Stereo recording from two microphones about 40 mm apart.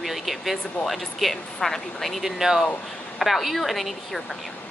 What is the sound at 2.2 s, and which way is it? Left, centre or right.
Speech, centre.